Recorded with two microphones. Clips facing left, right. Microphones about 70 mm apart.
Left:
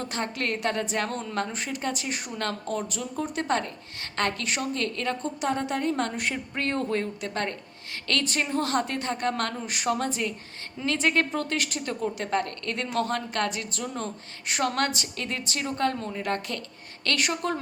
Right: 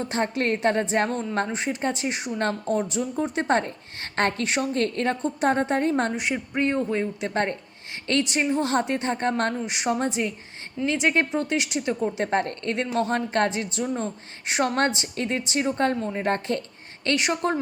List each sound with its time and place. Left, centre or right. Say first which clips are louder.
0.0 s a woman's voice: right 5 dB; right
6.1 s speech: right 4 dB; centre
7.3 s a woman's voice: right 5 dB; right
17.0 s a woman's voice: right 4 dB; right